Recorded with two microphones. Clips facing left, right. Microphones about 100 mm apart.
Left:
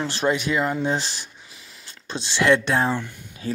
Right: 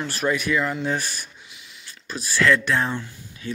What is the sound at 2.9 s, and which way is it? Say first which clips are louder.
Speech: left 4 dB; 60° left (ahead or behind).